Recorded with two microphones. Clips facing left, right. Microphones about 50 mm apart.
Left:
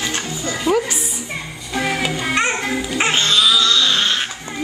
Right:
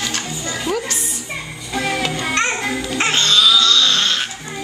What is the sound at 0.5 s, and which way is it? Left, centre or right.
Music, centre.